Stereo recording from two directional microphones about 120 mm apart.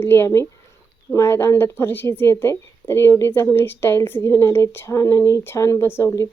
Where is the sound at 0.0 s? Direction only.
20° left (ahead or behind).